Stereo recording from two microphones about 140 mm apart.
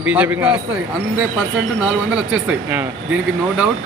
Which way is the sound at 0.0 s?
10° right (ahead or behind).